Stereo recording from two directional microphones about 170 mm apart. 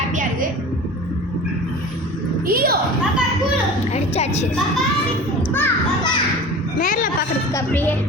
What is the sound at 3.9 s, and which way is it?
Speech, 40° left (ahead or behind).